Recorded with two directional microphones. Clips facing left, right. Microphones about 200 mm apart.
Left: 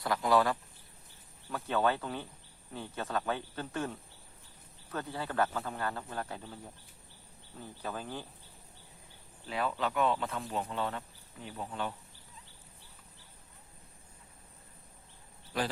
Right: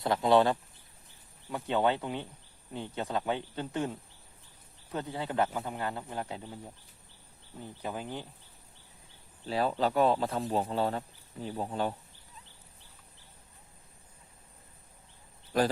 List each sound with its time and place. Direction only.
0.0 s a man's voice: 25° right (ahead or behind)
7.6 s speech: 15° right (ahead or behind)
9.5 s speech: 35° right (ahead or behind)